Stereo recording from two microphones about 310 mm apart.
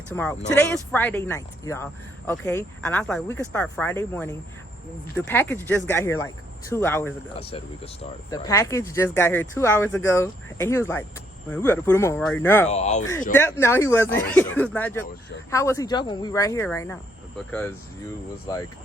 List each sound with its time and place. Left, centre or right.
0.1 s speech: centre
7.3 s speech: centre
12.6 s speech: left
13.3 s speech: centre